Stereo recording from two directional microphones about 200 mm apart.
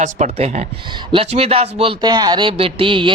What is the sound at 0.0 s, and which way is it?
Speech, 35° right (ahead or behind).